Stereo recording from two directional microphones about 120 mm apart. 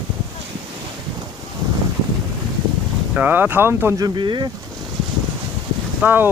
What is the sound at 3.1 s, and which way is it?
Speech, 15° right (ahead or behind).